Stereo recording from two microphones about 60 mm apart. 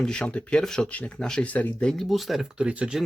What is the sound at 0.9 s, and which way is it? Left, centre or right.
Speech, left.